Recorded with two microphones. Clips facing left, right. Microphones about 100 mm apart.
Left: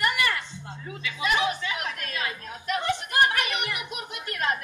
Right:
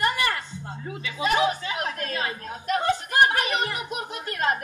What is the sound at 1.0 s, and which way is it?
Speech, 35° right (ahead or behind).